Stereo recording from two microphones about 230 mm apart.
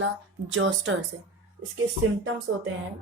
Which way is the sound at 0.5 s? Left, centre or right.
Right.